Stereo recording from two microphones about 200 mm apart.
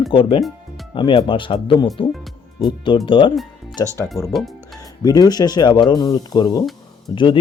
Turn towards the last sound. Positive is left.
turn(degrees=25)  # may be behind; listen again after turning